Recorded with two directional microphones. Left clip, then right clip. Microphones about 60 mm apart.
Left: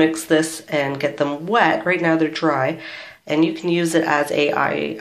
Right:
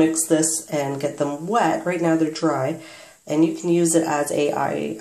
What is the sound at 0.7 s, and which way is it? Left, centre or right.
Speech, centre.